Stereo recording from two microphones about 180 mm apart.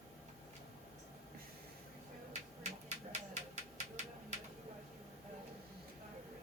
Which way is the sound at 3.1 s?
40° right (ahead or behind).